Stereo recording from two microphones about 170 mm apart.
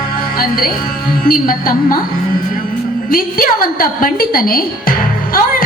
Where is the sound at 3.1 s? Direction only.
60° left (ahead or behind).